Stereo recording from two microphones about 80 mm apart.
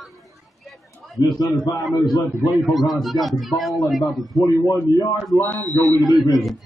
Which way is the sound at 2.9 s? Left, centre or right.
Centre.